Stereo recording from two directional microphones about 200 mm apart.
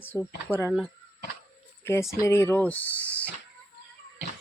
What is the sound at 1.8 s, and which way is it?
Speech, 15° left (ahead or behind).